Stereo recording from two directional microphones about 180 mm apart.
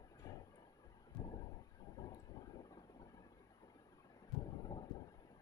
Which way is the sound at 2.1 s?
20° left (ahead or behind).